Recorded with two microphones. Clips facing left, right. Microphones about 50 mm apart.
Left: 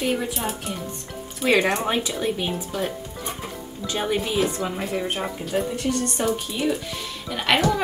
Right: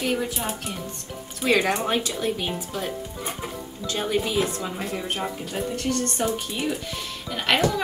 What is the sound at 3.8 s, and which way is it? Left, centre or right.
Speech, left.